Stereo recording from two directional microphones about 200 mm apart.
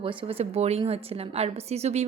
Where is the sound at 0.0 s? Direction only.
25° right (ahead or behind).